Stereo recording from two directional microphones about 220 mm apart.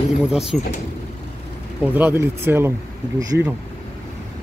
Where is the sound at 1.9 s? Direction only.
10° right (ahead or behind).